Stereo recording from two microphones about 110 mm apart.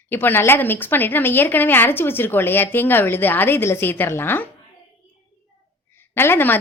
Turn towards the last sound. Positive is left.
turn(degrees=20)  # may be behind; listen again after turning